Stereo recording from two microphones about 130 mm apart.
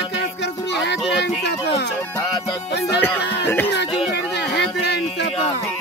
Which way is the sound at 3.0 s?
15° left (ahead or behind).